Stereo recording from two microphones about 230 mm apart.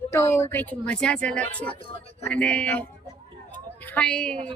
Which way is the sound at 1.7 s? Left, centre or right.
Left.